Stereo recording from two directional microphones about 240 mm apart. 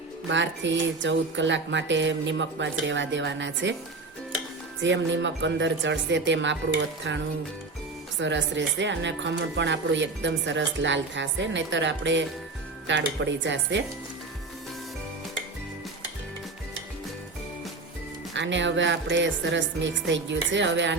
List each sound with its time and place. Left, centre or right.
0.3 s speech: right
4.8 s speech: right
18.3 s speech: right